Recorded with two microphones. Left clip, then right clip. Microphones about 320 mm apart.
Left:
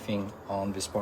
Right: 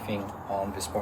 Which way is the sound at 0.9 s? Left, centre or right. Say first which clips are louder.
Right 1 dB; left.